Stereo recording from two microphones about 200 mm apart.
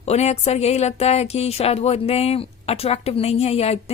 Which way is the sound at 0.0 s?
35° left (ahead or behind).